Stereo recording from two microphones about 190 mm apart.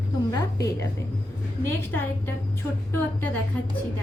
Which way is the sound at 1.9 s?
10° left (ahead or behind).